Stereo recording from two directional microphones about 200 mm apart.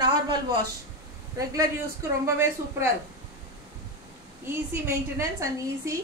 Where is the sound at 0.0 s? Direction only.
20° right (ahead or behind).